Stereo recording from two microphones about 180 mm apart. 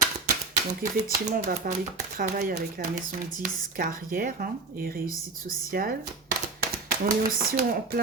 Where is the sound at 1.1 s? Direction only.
50° right (ahead or behind).